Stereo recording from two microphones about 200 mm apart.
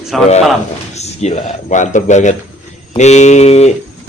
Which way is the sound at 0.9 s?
35° left (ahead or behind).